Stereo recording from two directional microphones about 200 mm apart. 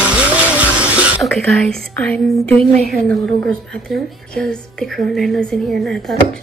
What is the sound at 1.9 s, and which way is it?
A woman's voice, 5° left (ahead or behind).